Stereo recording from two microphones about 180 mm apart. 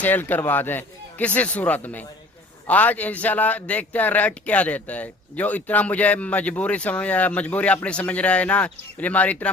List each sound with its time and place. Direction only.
0.0 s speech: 10° left (ahead or behind)